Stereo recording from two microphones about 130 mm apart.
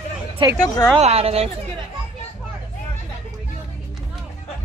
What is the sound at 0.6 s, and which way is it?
Speech, 30° left (ahead or behind).